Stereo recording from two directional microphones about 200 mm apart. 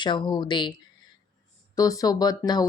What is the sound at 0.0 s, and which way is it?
Speech, 25° left (ahead or behind).